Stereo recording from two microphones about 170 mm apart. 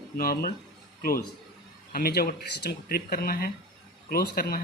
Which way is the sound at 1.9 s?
60° left (ahead or behind).